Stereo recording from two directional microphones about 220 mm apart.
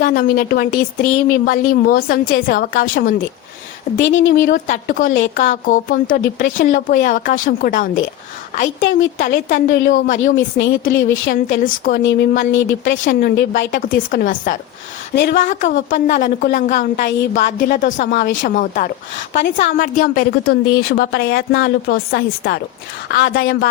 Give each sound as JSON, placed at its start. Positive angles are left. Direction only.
{"t": 0.0, "sound": "a woman's voice", "side_deg": 40}
{"t": 4.0, "sound": "a woman's voice", "side_deg": 55}
{"t": 4.3, "sound": "a woman's voice", "side_deg": 40}
{"t": 9.1, "sound": "a woman's voice", "side_deg": 35}
{"t": 10.3, "sound": "a woman's voice", "side_deg": 60}
{"t": 11.3, "sound": "a woman's voice", "side_deg": 40}
{"t": 12.5, "sound": "a woman's voice", "side_deg": 55}
{"t": 12.8, "sound": "a woman's voice", "side_deg": 40}
{"t": 15.1, "sound": "speech", "side_deg": 55}
{"t": 15.4, "sound": "a woman's voice", "side_deg": 35}
{"t": 17.1, "sound": "a woman's voice", "side_deg": 55}
{"t": 17.4, "sound": "a woman's voice", "side_deg": 35}